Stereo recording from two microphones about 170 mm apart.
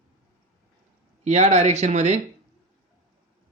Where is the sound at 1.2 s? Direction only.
40° right (ahead or behind).